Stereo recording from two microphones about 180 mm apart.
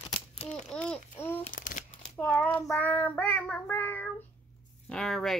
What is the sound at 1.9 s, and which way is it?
Child singing, 10° left (ahead or behind).